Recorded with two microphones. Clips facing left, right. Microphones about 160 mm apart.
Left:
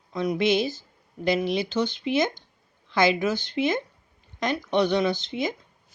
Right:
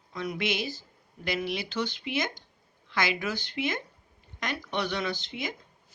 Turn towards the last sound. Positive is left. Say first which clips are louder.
# left 8 dB
turn(degrees=25)  # may be behind; listen again after turning